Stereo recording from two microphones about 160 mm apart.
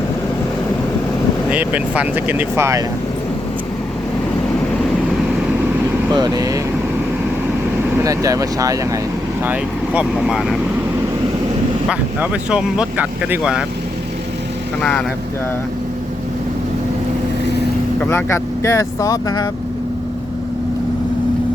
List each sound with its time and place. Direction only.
1.5 s speech: 10° right (ahead or behind)
6.1 s speech: 25° right (ahead or behind)
8.0 s speech: 20° right (ahead or behind)
9.5 s speech: 5° right (ahead or behind)
11.9 s speech: 5° right (ahead or behind)
14.8 s speech: 5° left (ahead or behind)
18.0 s speech: 15° left (ahead or behind)